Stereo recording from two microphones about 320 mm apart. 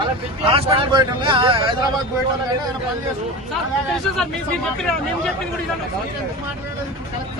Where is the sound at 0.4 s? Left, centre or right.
Centre.